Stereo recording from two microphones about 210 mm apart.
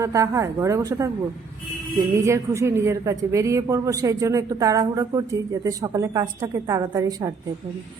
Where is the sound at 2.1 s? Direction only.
15° right (ahead or behind).